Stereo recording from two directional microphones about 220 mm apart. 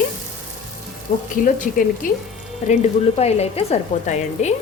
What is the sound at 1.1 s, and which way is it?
Speech, 35° left (ahead or behind).